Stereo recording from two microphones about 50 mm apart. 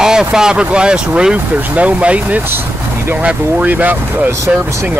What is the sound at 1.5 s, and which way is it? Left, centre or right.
Speech, right.